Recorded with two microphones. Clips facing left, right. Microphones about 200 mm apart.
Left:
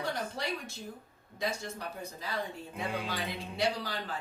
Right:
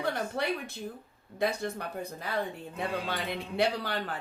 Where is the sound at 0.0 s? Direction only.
60° right (ahead or behind).